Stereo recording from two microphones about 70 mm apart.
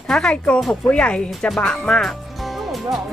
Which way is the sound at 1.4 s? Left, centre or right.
Centre.